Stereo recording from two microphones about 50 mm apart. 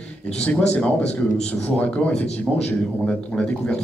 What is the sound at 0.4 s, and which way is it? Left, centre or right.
Speech, left.